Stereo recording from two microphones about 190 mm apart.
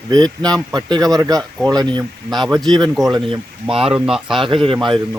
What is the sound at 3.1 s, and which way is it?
Speech, 25° right (ahead or behind).